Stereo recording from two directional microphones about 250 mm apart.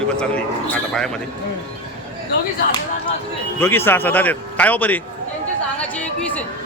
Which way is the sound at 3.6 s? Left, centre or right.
Centre.